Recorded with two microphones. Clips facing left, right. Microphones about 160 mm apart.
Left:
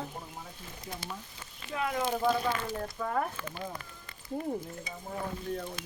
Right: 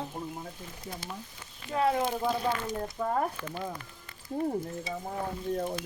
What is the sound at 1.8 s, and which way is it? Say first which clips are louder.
Speech: right 6 dB; 30° right (ahead or behind).